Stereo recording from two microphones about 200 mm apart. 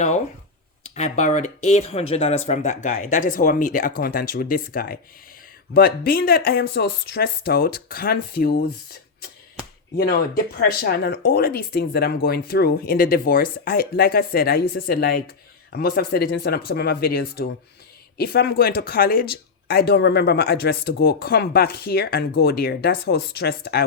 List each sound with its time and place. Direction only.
0.9 s speech: 35° left (ahead or behind); by 23.8 s 55° left (ahead or behind)